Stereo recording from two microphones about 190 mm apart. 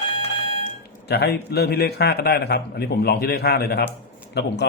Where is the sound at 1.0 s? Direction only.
60° left (ahead or behind).